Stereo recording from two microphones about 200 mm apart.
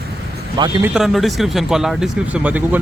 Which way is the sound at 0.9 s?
Centre (ahead or behind).